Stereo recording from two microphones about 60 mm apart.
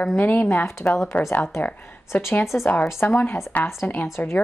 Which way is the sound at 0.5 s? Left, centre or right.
Left.